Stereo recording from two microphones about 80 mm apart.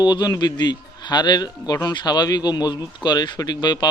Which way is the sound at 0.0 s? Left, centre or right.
Left.